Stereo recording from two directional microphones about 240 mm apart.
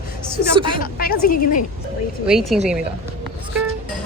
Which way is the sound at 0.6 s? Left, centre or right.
Right.